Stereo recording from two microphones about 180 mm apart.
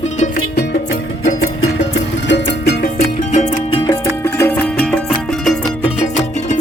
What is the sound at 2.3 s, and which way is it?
Music, 70° left (ahead or behind).